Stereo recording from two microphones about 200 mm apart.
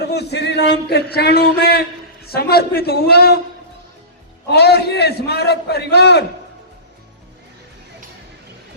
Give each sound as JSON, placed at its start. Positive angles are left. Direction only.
{"t": 0.0, "sound": "a man's voice", "side_deg": 55}
{"t": 4.4, "sound": "a man's voice", "side_deg": 55}